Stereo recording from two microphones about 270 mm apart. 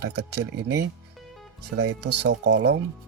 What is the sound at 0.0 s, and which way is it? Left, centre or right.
Speech, right.